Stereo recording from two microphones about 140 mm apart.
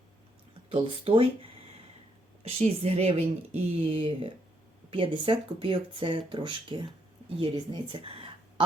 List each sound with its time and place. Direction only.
0.7 s a woman's voice: 40° right (ahead or behind)